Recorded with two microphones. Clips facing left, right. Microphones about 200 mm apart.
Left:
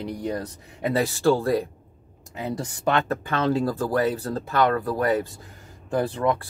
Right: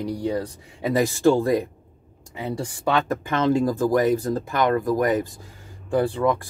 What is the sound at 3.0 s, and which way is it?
Speech, 15° right (ahead or behind).